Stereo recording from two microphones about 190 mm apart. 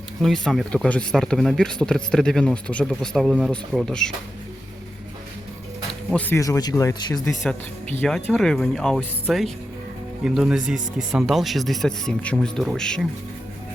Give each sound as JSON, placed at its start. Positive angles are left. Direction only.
{"t": 0.2, "sound": "speech", "side_deg": 0}
{"t": 5.9, "sound": "speech", "side_deg": 5}
{"t": 8.0, "sound": "speech", "side_deg": 0}